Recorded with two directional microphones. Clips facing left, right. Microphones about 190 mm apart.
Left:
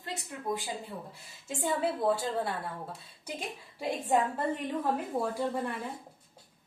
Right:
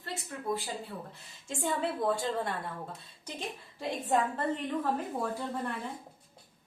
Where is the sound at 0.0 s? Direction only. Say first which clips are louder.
Even; 15° left (ahead or behind).